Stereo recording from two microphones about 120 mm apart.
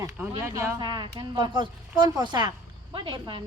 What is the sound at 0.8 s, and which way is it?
A woman's voice, 40° right (ahead or behind).